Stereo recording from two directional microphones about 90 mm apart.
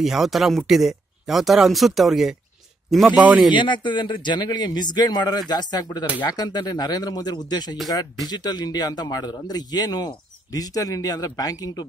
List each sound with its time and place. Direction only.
0.0 s speech: centre (ahead or behind)
3.2 s speech: 10° right (ahead or behind)
3.5 s a man's voice: 60° left (ahead or behind); by 11.8 s 45° left (ahead or behind)